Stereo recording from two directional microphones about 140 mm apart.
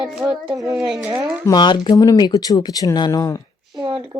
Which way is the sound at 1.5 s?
35° left (ahead or behind).